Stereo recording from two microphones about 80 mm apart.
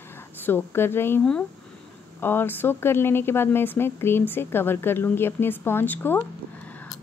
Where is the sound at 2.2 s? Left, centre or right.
Left.